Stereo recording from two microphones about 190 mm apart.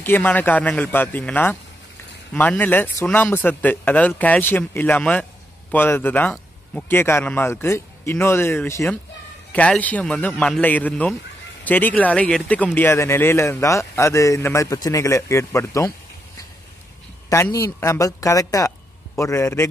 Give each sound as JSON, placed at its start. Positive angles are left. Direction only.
{"t": 0.0, "sound": "speech", "side_deg": 10}
{"t": 17.3, "sound": "speech", "side_deg": 15}